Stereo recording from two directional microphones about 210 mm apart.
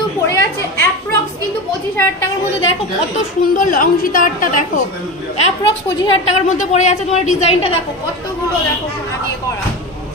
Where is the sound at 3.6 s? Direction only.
40° left (ahead or behind).